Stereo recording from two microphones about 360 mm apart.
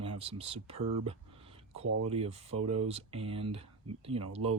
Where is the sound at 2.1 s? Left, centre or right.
Centre.